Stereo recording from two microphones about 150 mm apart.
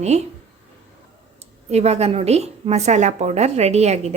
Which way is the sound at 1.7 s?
45° right (ahead or behind).